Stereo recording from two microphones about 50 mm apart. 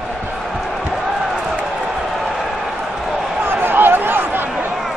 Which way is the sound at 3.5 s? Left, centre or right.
Right.